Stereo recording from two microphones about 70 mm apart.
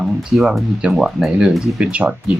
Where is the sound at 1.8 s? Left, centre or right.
Centre.